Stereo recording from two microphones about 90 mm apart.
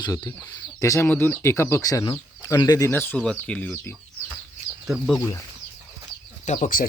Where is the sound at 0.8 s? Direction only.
35° left (ahead or behind).